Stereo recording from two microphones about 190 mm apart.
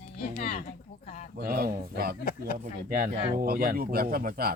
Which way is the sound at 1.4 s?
50° right (ahead or behind).